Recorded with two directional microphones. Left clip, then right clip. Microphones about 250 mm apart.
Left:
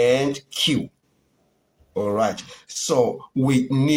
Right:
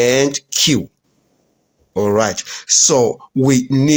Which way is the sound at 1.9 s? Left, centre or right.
Right.